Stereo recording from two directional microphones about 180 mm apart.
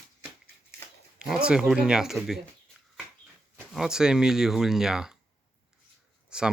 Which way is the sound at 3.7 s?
5° right (ahead or behind).